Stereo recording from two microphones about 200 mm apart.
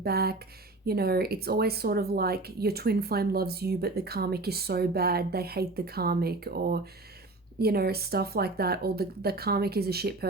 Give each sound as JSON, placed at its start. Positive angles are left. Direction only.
{"t": 0.0, "sound": "speech", "side_deg": -50}